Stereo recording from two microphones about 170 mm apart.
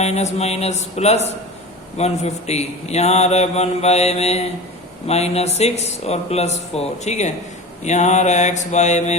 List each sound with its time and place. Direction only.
0.0 s a man's voice: 40° left (ahead or behind)
7.9 s mantra: 45° left (ahead or behind)